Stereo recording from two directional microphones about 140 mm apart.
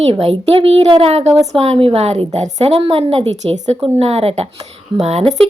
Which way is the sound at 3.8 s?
45° right (ahead or behind).